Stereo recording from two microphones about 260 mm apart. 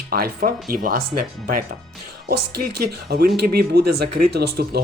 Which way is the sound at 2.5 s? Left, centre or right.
Right.